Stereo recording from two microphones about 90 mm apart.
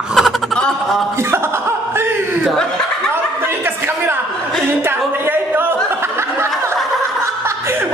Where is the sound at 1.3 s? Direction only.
30° right (ahead or behind).